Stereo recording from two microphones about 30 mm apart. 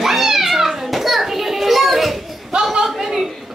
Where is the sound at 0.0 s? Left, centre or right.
Centre.